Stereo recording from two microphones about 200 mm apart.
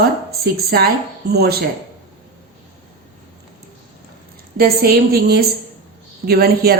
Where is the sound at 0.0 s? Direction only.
50° right (ahead or behind).